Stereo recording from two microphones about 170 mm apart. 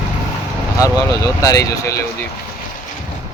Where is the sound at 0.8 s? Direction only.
20° left (ahead or behind).